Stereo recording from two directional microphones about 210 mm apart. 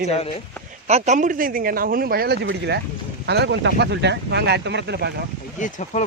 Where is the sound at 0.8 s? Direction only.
35° right (ahead or behind); by 5.3 s 50° right (ahead or behind).